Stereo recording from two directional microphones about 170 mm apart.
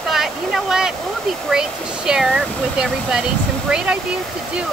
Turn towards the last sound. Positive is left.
turn(degrees=-5)  # may be behind; listen again after turning